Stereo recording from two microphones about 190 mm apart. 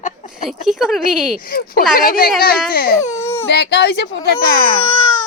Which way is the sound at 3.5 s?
60° left (ahead or behind).